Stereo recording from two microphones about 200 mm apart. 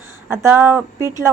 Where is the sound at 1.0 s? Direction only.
20° left (ahead or behind).